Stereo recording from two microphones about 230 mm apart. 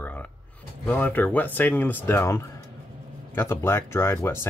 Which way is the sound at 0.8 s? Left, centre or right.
Centre.